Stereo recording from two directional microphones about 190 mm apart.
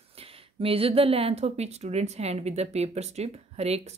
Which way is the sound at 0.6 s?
30° right (ahead or behind).